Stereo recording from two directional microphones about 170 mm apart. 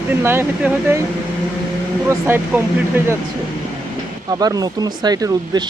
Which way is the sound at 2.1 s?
15° right (ahead or behind).